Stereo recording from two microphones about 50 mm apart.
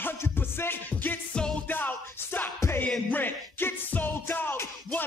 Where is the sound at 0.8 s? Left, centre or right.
Left.